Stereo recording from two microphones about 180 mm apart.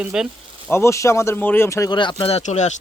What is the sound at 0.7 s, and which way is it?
Speech, 15° left (ahead or behind).